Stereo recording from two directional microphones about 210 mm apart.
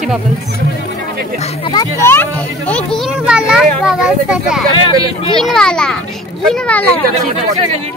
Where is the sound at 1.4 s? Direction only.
25° left (ahead or behind); by 7.0 s 5° left (ahead or behind).